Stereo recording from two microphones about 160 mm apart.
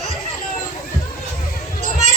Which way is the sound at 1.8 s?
50° right (ahead or behind).